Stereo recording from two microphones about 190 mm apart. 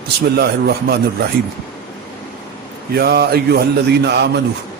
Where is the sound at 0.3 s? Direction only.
55° right (ahead or behind).